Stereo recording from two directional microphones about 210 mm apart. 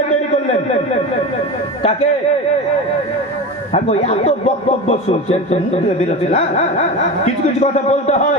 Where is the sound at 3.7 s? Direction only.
30° left (ahead or behind).